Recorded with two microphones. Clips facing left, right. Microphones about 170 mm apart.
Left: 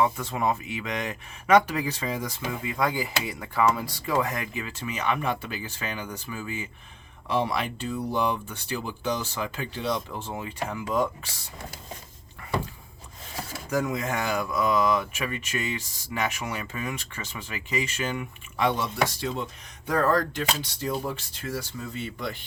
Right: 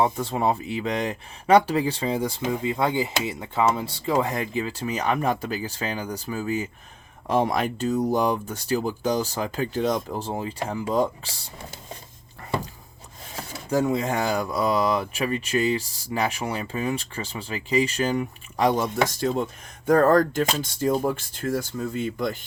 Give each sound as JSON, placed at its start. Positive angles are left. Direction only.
{"t": 0.0, "sound": "speech", "side_deg": -30}
{"t": 13.7, "sound": "speech", "side_deg": -30}